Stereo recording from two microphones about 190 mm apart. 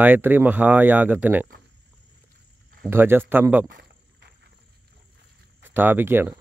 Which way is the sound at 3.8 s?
55° right (ahead or behind).